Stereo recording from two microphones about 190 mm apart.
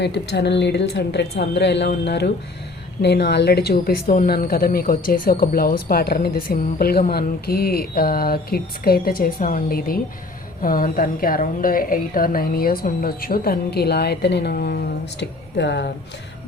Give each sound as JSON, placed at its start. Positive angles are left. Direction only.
{"t": 0.0, "sound": "a woman's voice", "side_deg": 65}